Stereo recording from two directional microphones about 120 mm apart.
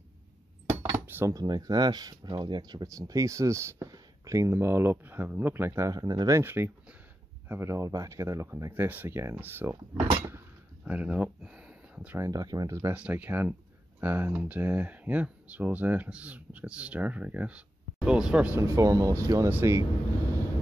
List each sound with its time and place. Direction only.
0.9 s dishes: 20° right (ahead or behind)
1.3 s speech: 35° right (ahead or behind); by 12.2 s 10° right (ahead or behind)
12.2 s speech: 30° right (ahead or behind)
12.9 s speech: 10° right (ahead or behind)
18.6 s speech: 25° right (ahead or behind)